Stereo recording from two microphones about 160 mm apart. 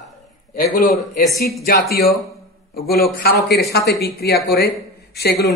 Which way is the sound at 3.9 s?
85° left.